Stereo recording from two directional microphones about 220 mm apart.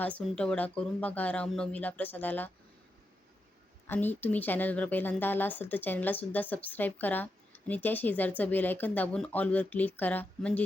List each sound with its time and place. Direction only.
0.0 s a woman's voice: 5° left (ahead or behind)
3.8 s a woman's voice: 10° left (ahead or behind)